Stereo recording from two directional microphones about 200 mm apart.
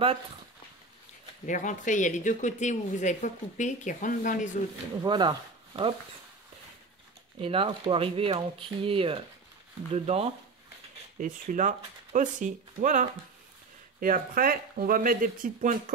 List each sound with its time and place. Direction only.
1.4 s speech: 40° left (ahead or behind)
5.0 s speech: 20° right (ahead or behind)
7.4 s speech: 25° right (ahead or behind)